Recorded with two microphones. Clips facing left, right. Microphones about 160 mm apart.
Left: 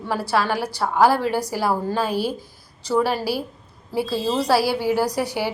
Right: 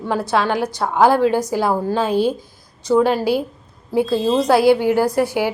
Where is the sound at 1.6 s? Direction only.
20° right (ahead or behind).